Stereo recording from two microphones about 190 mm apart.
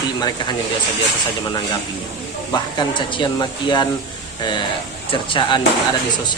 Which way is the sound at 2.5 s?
20° left (ahead or behind).